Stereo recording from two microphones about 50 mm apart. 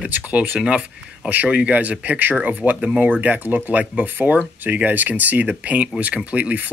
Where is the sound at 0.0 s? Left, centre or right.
Right.